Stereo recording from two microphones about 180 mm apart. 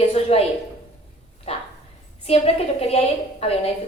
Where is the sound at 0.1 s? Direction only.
35° left (ahead or behind).